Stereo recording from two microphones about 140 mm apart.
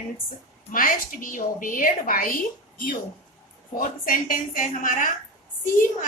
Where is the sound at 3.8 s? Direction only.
90° left.